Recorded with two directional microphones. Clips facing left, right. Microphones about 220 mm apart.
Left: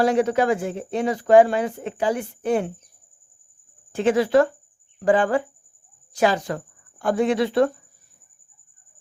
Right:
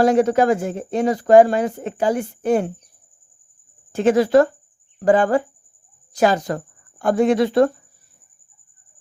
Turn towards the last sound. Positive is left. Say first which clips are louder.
# right 4 dB
turn(degrees=-45)  # may be behind; listen again after turning